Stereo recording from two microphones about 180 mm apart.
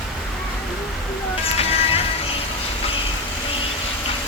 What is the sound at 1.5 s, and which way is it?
Music, 35° left (ahead or behind).